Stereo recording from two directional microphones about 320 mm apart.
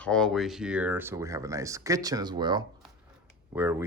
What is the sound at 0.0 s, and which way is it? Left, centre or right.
Speech, centre.